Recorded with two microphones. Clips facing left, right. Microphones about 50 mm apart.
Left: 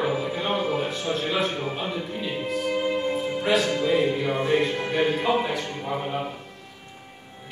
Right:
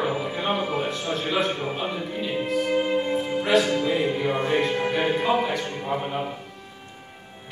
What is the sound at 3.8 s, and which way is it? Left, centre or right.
Speech, centre.